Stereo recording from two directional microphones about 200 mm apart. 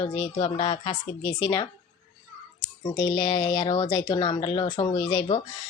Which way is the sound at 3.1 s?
20° left (ahead or behind).